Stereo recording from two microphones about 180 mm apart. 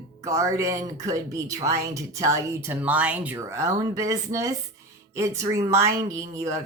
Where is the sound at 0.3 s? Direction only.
15° right (ahead or behind).